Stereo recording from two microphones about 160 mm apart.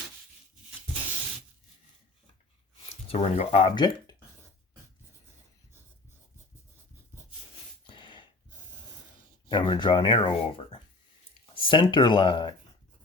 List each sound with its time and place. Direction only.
3.1 s speech: 40° left (ahead or behind)
3.8 s speech: 25° left (ahead or behind)
7.9 s a sound: 30° left (ahead or behind)
9.5 s speech: 30° left (ahead or behind)